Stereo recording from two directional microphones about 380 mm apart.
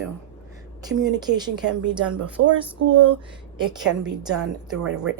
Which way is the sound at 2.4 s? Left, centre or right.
Right.